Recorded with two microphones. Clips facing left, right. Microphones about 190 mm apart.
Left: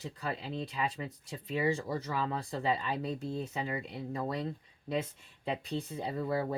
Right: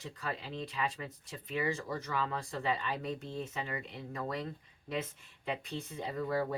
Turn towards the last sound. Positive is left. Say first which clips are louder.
# left 1 dB
turn(degrees=25)  # may be behind; listen again after turning